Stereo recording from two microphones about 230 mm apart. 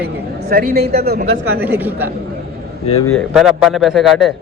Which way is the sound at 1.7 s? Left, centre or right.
Centre.